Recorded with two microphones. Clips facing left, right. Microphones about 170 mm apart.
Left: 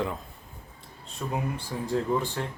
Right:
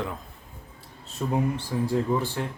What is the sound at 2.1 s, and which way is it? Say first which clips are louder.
Speech: left 1 dB; centre (ahead or behind).